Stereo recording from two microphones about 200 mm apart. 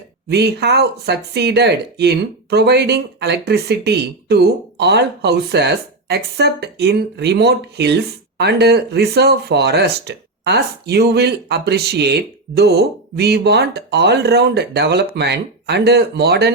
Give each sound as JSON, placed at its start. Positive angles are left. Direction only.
{"t": 0.3, "sound": "speech", "side_deg": -55}